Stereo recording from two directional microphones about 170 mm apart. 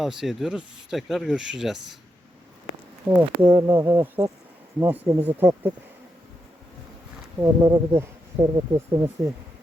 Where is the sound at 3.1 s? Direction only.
15° right (ahead or behind).